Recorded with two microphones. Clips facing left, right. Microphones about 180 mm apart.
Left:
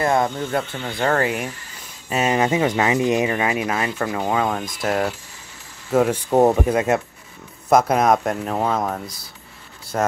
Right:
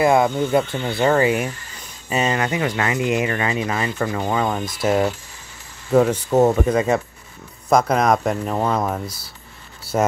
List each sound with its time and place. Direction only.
0.0 s speech: 10° right (ahead or behind)
2.3 s speech: 20° left (ahead or behind)
3.3 s speech: 10° left (ahead or behind)